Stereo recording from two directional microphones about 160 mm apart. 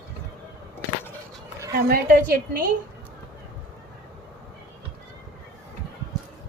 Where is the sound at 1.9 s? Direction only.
70° right (ahead or behind).